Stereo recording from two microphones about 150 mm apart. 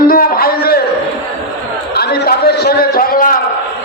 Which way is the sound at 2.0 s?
90° left.